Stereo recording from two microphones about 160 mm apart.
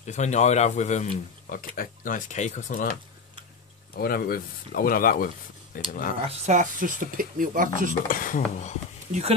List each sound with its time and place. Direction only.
0.0 s speech: 45° left (ahead or behind)
3.9 s speech: 70° left (ahead or behind)
6.2 s speech: 50° right (ahead or behind)
8.1 s speech: 55° left (ahead or behind)